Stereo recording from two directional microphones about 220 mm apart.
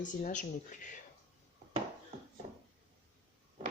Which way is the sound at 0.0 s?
35° left (ahead or behind).